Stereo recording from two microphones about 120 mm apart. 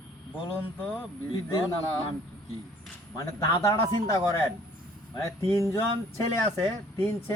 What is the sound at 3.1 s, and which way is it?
A man's voice, 25° left (ahead or behind).